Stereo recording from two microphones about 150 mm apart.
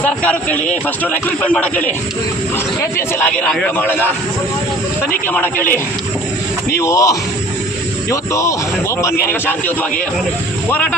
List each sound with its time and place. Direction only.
0.0 s a man's voice: 10° left (ahead or behind)
3.2 s a man's voice: 10° left (ahead or behind)
5.3 s a man's voice: 10° left (ahead or behind)